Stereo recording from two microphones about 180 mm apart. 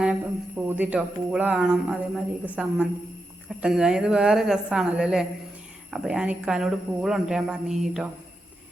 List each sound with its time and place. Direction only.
0.0 s speech: 5° right (ahead or behind)